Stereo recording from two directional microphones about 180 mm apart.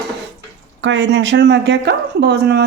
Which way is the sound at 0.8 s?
85° right.